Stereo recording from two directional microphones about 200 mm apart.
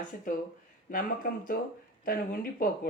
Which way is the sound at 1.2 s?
45° left (ahead or behind).